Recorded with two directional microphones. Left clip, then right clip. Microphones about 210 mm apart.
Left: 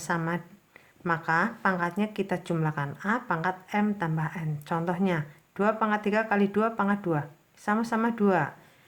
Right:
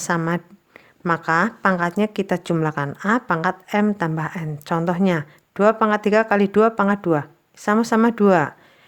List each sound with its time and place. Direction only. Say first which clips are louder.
0.0 s a woman's voice: right 7 dB; 40° right (ahead or behind)